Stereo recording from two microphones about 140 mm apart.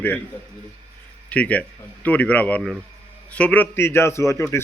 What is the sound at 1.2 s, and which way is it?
Speech, 10° left (ahead or behind).